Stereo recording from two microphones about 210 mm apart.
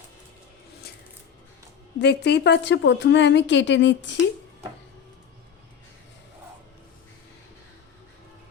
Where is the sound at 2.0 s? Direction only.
55° left (ahead or behind).